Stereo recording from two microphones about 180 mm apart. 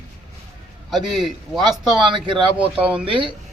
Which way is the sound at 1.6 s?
25° right (ahead or behind).